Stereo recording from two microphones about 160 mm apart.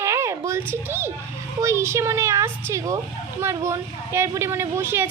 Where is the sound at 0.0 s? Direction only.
20° right (ahead or behind).